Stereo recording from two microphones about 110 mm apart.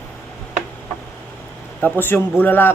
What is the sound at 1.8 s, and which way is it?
Speech, 20° left (ahead or behind).